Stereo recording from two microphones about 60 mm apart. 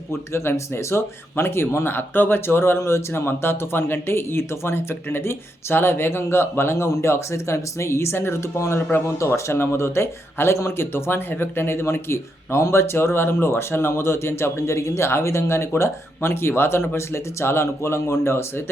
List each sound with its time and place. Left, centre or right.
0.3 s speech: left